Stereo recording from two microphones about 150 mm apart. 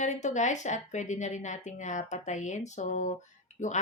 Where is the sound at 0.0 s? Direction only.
50° left (ahead or behind).